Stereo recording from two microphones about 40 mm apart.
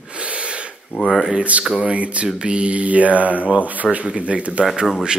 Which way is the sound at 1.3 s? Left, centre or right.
Right.